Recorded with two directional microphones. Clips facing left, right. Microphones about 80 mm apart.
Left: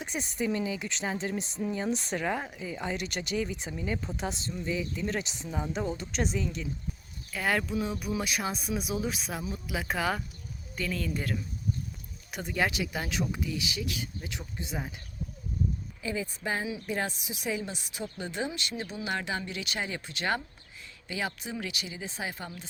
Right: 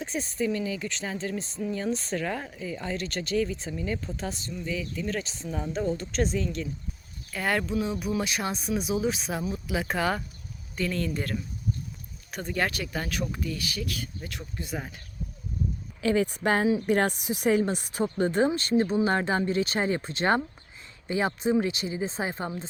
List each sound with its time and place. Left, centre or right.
0.0 s speech: centre
16.0 s speech: right